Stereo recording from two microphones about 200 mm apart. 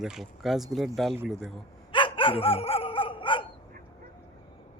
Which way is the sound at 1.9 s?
25° left (ahead or behind).